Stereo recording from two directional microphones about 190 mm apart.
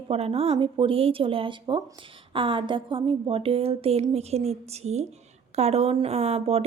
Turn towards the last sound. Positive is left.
turn(degrees=-35)  # may be behind; listen again after turning